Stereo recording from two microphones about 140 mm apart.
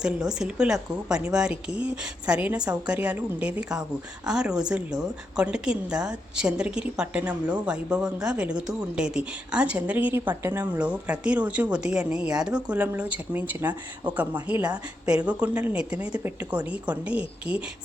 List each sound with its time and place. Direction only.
0.0 s a woman's voice: 5° right (ahead or behind)